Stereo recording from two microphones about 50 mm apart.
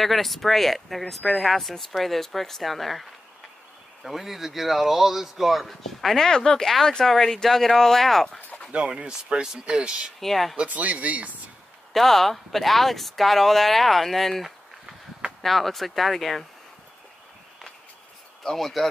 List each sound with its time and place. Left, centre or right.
0.0 s speech: centre
8.7 s speech: centre
10.2 s speech: centre
10.7 s speech: right
11.9 s speech: centre
18.4 s speech: centre